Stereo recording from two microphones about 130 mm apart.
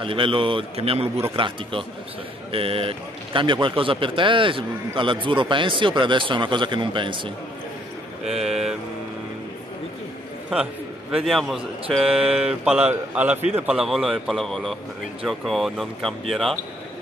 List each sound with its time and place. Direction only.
0.0 s a man's voice: 40° right (ahead or behind)
8.3 s mantra: 5° right (ahead or behind)
10.5 s a man's voice: 5° right (ahead or behind)
12.2 s a man's voice: 50° right (ahead or behind)
12.6 s a man's voice: 10° right (ahead or behind)
13.8 s a man's voice: centre (ahead or behind)